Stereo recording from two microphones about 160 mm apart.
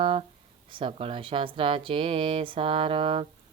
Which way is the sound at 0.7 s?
35° right (ahead or behind).